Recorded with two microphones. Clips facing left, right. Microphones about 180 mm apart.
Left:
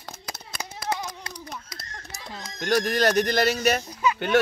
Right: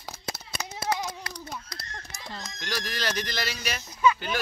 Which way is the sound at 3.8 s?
30° left (ahead or behind).